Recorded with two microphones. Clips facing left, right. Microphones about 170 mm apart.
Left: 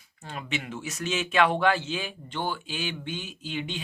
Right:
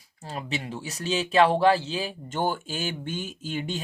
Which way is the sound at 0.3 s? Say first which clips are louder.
Right 2 dB; 35° right (ahead or behind).